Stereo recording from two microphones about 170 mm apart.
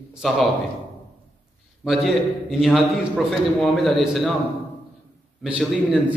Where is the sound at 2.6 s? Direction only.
Centre (ahead or behind).